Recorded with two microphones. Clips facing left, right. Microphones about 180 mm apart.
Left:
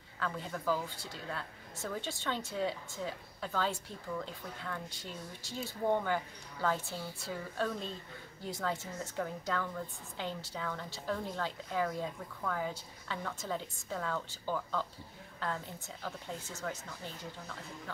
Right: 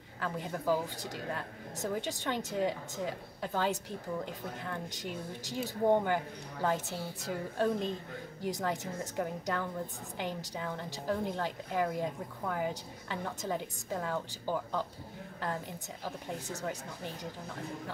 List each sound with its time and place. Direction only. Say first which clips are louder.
0.2 s speech: right 2 dB; 15° right (ahead or behind)